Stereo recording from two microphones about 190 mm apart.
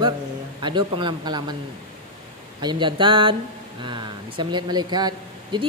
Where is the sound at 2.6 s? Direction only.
25° right (ahead or behind).